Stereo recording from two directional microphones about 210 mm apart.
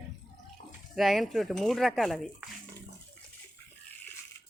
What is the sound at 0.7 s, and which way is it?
Speech, centre (ahead or behind).